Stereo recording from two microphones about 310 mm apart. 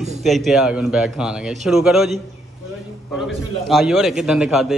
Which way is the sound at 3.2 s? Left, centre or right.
Centre.